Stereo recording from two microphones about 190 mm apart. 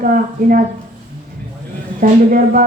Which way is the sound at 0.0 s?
45° right (ahead or behind).